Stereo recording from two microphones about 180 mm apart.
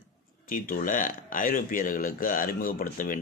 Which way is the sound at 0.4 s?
50° left (ahead or behind).